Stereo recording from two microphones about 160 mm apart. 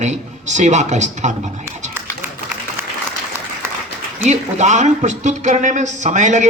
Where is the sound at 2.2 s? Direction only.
15° right (ahead or behind).